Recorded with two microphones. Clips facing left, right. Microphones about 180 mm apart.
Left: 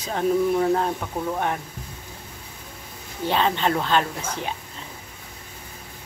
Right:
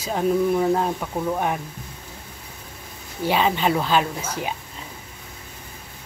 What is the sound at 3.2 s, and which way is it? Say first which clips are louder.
Speech: right 2 dB; 10° right (ahead or behind).